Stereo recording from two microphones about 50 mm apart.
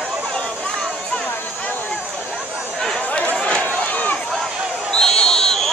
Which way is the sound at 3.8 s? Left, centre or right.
Left.